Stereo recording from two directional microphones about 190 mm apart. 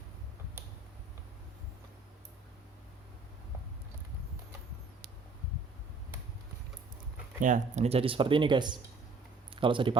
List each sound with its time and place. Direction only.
7.4 s speech: 40° right (ahead or behind)